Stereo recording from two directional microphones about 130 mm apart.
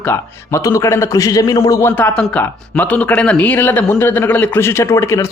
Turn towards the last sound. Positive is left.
turn(degrees=20)  # may be behind; listen again after turning